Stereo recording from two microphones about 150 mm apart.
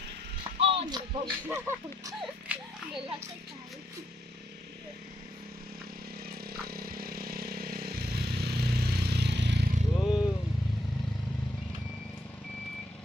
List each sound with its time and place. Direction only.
0.6 s a sound: 40° right (ahead or behind)
1.5 s speech: 15° right (ahead or behind)
6.2 s vehicle: 90° right
10.0 s vehicle: 5° right (ahead or behind)